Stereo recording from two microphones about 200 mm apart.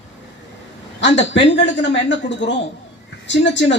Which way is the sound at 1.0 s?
65° left (ahead or behind).